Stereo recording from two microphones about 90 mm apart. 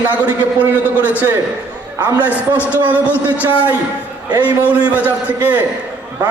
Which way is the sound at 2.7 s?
15° right (ahead or behind).